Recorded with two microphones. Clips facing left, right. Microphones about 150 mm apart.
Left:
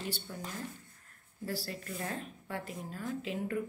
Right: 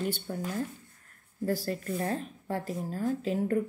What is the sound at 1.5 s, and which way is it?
Speech, 45° right (ahead or behind).